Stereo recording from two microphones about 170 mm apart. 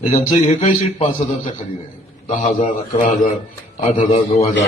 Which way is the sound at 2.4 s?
45° left (ahead or behind).